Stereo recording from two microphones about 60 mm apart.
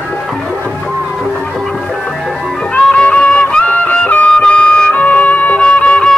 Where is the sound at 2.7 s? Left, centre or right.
Centre.